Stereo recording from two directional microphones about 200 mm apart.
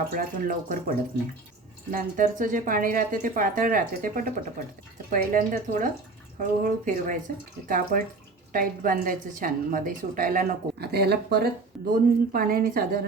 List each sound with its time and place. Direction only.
0.1 s a woman's voice: 45° right (ahead or behind)